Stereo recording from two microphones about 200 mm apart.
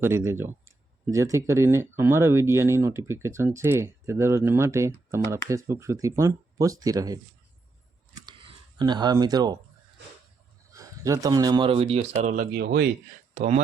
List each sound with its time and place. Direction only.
0.0 s speech: 15° right (ahead or behind)
8.1 s a sound: 25° right (ahead or behind)
10.7 s speech: 15° right (ahead or behind); by 12.5 s 35° right (ahead or behind)
12.5 s speech: 55° right (ahead or behind)
13.3 s speech: 35° right (ahead or behind)